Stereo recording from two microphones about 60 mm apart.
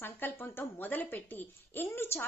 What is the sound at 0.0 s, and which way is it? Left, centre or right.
A woman's voice, left.